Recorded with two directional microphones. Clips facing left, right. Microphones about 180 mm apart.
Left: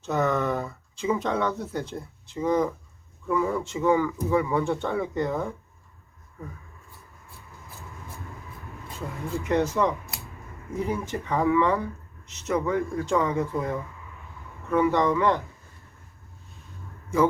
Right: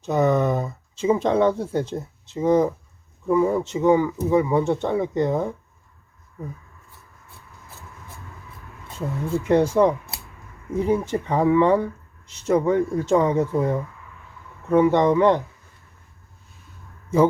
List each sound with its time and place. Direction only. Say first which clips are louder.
0.0 s speech: right 5 dB; 15° right (ahead or behind)
9.5 s speech: right 6 dB; 30° right (ahead or behind)